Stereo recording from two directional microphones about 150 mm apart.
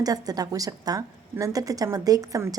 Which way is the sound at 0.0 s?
25° right (ahead or behind).